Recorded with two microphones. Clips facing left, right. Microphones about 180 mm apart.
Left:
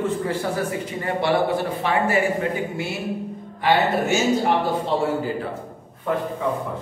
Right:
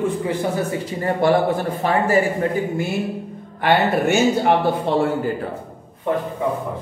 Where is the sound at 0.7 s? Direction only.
40° right (ahead or behind).